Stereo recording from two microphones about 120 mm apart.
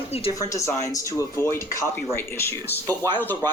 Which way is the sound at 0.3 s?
30° left (ahead or behind).